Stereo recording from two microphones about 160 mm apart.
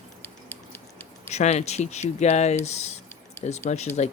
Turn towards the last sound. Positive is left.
turn(degrees=45)  # may be behind; listen again after turning